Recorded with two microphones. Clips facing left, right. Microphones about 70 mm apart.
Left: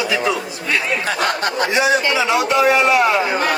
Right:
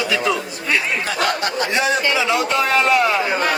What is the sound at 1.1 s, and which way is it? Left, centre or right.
Speech, left.